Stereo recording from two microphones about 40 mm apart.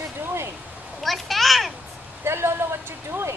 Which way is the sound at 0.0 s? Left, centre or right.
Right.